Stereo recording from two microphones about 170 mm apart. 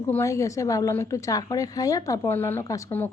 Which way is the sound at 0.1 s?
15° left (ahead or behind).